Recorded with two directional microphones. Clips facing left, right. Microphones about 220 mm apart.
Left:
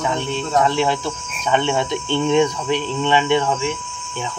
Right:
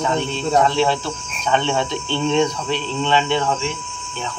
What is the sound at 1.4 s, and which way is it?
Speech, 10° left (ahead or behind).